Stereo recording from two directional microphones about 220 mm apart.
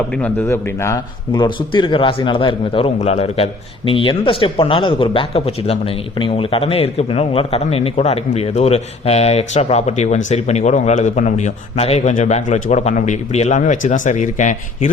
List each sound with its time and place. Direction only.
0.2 s a man's voice: 10° left (ahead or behind); by 14.8 s 35° left (ahead or behind)